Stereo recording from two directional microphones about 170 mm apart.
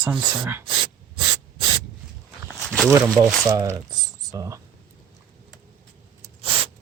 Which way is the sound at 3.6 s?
20° right (ahead or behind).